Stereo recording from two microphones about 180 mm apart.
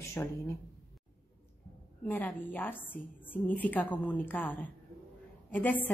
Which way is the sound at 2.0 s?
10° left (ahead or behind).